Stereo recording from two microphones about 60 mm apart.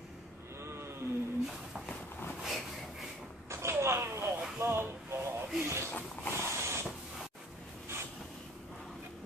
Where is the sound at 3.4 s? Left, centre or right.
Right.